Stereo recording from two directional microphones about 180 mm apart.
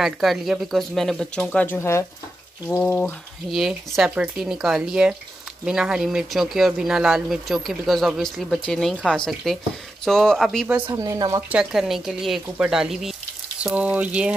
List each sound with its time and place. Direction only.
0.0 s speech: centre (ahead or behind)
10.9 s speech: 20° right (ahead or behind)
11.5 s speech: centre (ahead or behind)